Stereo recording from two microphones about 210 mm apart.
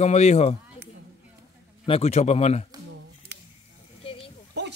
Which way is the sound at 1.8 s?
30° left (ahead or behind).